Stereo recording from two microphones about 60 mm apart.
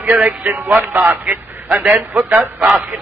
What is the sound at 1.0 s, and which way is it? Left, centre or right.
Speech, right.